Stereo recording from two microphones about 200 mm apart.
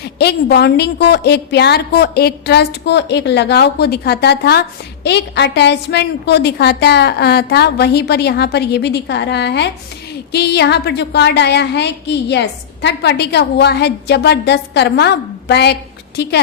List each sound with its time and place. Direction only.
0.0 s a woman's voice: 55° left (ahead or behind)